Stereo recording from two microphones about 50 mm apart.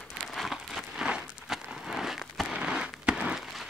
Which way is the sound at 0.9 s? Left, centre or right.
Centre.